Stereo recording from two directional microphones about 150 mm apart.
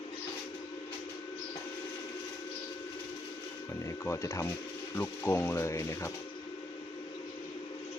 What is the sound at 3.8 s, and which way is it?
Speech, 20° left (ahead or behind).